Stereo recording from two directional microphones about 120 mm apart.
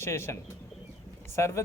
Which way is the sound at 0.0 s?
20° left (ahead or behind).